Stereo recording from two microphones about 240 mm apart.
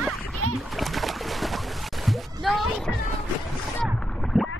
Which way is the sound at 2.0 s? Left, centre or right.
Centre.